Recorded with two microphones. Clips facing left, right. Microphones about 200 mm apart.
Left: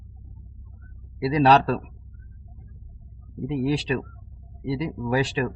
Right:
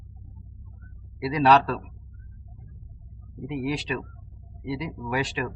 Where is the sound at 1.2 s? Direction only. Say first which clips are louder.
Left 2 dB; 30° left (ahead or behind).